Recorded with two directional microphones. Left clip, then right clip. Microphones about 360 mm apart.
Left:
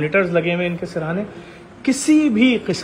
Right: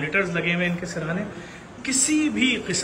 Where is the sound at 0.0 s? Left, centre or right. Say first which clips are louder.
Left 6 dB; centre.